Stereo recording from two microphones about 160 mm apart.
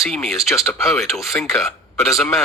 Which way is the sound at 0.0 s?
Centre (ahead or behind).